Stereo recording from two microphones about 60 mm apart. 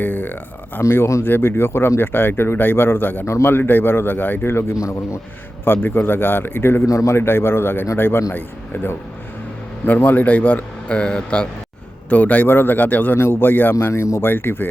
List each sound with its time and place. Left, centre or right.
0.0 s speech: left
0.8 s speech: left
1.2 s speech: left
4.8 s a man's voice: left
5.6 s speech: left
6.8 s a man's voice: left
7.2 s a man's voice: left; by 11.4 s centre
12.0 s a man's voice: left
13.1 s speech: left
13.7 s speech: left
14.3 s speech: left